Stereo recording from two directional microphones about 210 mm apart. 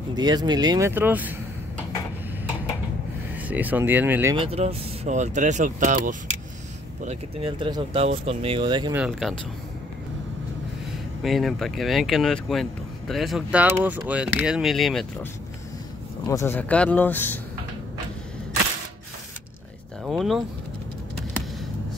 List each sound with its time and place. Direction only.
0.1 s speech: 20° right (ahead or behind)
3.3 s speech: 10° right (ahead or behind)
4.4 s speech: 30° right (ahead or behind)
8.9 s speech: 5° right (ahead or behind)
11.2 s speech: centre (ahead or behind)
16.3 s speech: 15° left (ahead or behind)
20.1 s speech: centre (ahead or behind)